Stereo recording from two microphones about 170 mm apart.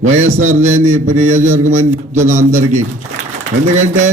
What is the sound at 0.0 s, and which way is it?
A man's voice, 45° right (ahead or behind).